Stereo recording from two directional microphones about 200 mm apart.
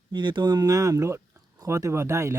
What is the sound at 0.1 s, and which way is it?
Speech, 25° right (ahead or behind).